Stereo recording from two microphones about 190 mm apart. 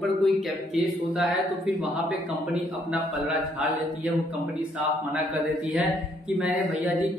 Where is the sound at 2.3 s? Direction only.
5° right (ahead or behind).